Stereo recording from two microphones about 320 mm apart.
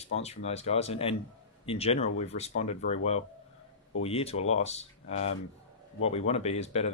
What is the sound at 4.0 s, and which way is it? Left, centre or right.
Speech, centre.